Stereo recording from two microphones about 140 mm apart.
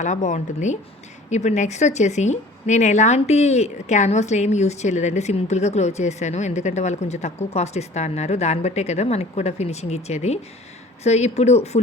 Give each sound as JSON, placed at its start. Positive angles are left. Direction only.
{"t": 0.0, "sound": "speech", "side_deg": 60}